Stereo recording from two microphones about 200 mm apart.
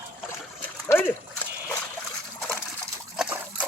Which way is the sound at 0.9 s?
10° left (ahead or behind).